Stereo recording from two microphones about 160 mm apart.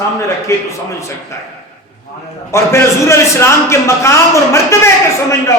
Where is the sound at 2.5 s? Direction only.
15° left (ahead or behind).